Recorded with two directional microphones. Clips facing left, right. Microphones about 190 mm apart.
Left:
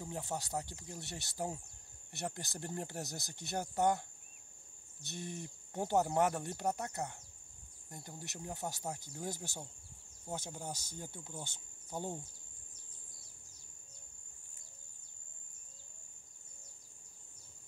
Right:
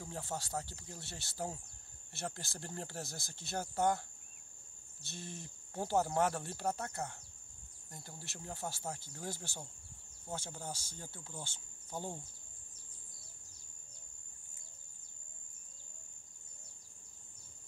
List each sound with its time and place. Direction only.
0.0 s speech: 20° left (ahead or behind)
5.0 s speech: 15° left (ahead or behind)